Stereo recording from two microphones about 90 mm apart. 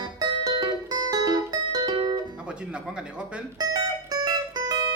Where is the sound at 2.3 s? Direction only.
10° right (ahead or behind).